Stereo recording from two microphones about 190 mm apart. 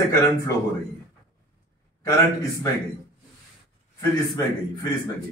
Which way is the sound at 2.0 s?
15° left (ahead or behind).